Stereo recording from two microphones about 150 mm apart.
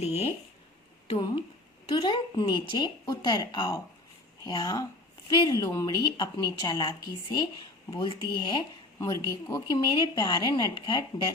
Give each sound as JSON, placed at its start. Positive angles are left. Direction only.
{"t": 1.0, "sound": "a woman's voice", "side_deg": 35}
{"t": 9.0, "sound": "a woman's voice", "side_deg": 20}